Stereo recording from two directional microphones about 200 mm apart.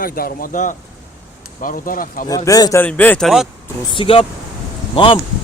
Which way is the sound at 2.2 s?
15° left (ahead or behind).